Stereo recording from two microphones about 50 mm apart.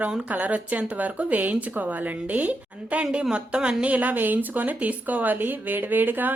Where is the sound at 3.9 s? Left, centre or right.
Right.